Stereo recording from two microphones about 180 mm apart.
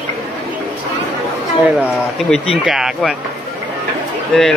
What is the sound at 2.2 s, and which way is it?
Speech, centre (ahead or behind).